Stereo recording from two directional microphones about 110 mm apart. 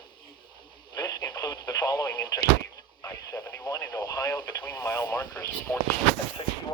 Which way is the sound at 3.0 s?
40° left (ahead or behind).